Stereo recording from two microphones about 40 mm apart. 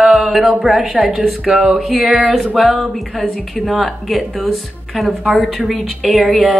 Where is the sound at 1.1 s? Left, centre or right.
Centre.